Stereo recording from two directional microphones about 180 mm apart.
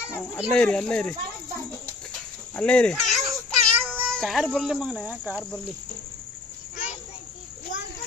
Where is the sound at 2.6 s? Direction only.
5° left (ahead or behind).